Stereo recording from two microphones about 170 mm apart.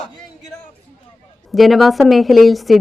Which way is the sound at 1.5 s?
Centre (ahead or behind).